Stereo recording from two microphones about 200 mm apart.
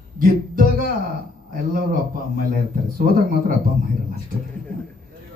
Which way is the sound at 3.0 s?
45° right (ahead or behind).